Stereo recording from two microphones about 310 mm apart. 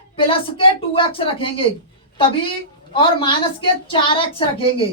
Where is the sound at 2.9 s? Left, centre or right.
Centre.